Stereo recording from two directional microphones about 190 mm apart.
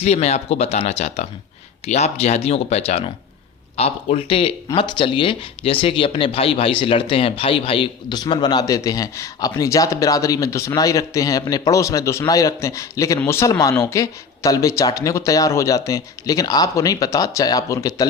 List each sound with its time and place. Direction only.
0.0 s a man's voice: 35° left (ahead or behind); by 18.0 s 15° left (ahead or behind)